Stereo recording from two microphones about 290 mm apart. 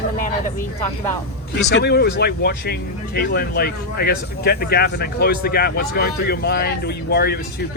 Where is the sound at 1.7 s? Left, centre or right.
Left.